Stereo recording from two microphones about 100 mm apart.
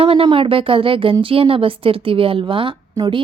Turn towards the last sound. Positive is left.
turn(degrees=-45)  # may be behind; listen again after turning